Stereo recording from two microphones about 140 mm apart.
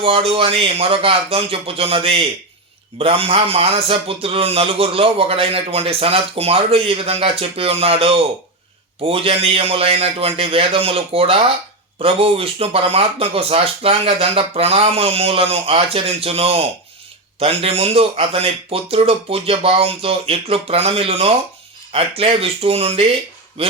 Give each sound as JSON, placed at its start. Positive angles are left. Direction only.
{"t": 0.0, "sound": "speech", "side_deg": -40}